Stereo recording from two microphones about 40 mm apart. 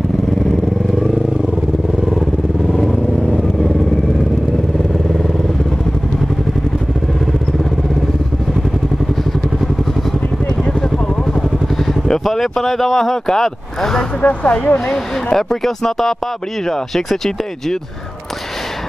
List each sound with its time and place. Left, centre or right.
2.9 s vehicle: centre
11.9 s speech: centre
14.2 s speech: left
15.3 s speech: centre